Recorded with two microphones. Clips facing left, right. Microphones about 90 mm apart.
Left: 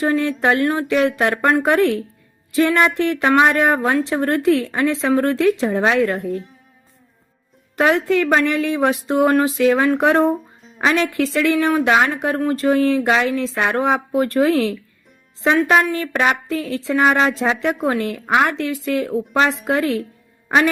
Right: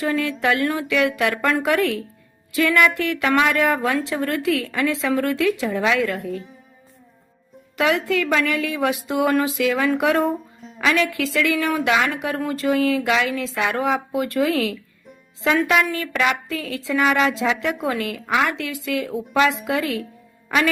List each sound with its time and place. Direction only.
0.1 s a woman's voice: 40° left (ahead or behind)
6.2 s speech: centre (ahead or behind)
7.8 s a woman's voice: 40° left (ahead or behind)
14.5 s a woman's voice: 25° left (ahead or behind)